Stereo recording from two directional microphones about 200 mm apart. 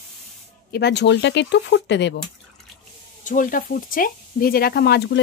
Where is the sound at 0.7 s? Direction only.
55° left (ahead or behind).